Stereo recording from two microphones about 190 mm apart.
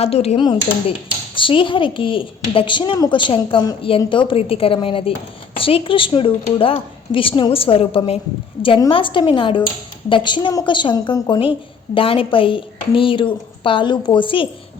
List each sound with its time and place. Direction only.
0.0 s a woman's voice: 30° left (ahead or behind)